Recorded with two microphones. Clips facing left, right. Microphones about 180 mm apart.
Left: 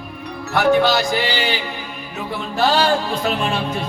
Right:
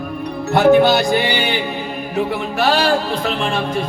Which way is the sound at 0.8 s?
60° right (ahead or behind).